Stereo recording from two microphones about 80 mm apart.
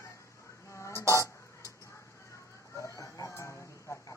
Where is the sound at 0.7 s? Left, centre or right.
Left.